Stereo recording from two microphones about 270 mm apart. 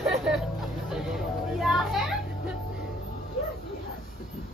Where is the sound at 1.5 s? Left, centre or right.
Centre.